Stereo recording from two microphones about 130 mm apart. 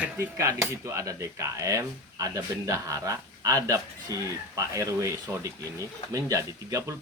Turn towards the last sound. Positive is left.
turn(degrees=-25)  # may be behind; listen again after turning